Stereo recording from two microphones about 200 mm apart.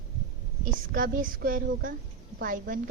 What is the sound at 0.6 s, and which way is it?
A woman's voice, 45° right (ahead or behind).